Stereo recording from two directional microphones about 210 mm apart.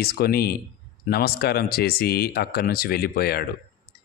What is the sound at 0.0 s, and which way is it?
A man's voice, 45° left (ahead or behind).